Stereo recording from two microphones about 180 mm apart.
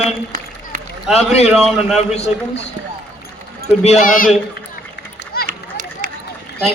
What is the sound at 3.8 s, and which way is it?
Speech, 40° left (ahead or behind).